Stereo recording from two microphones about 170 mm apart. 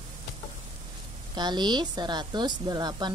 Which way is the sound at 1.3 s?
25° right (ahead or behind).